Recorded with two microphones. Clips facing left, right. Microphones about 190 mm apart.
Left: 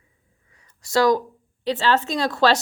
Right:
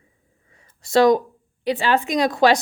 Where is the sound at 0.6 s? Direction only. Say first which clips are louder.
Right 4 dB; 25° right (ahead or behind).